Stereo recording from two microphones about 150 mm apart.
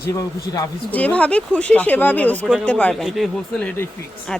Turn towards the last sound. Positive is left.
turn(degrees=5)  # may be behind; listen again after turning